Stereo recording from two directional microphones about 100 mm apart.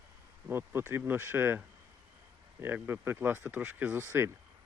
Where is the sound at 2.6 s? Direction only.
20° right (ahead or behind).